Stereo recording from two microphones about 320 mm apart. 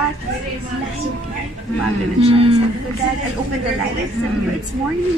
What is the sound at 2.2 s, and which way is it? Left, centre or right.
Speech, centre.